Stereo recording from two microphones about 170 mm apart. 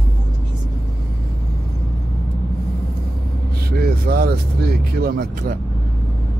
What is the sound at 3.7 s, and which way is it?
Vehicle, 65° right (ahead or behind).